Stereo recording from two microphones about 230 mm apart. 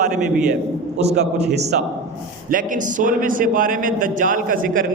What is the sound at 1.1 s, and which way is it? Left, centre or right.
A man's voice, right.